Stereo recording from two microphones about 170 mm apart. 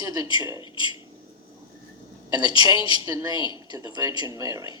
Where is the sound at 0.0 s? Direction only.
20° right (ahead or behind).